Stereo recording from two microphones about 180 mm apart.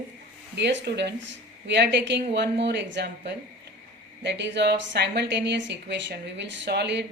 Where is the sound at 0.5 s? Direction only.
75° right (ahead or behind).